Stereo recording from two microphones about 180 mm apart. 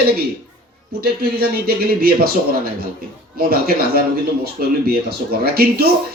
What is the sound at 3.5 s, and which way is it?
A man's voice, 55° right (ahead or behind).